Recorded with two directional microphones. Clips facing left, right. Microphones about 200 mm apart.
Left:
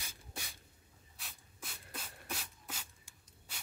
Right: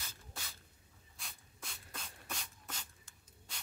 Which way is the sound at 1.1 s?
5° left (ahead or behind).